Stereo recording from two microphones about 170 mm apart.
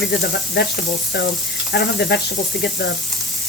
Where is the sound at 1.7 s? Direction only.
80° left.